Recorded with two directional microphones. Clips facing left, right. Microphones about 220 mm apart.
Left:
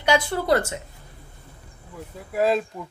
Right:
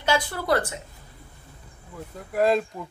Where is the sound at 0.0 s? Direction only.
20° left (ahead or behind).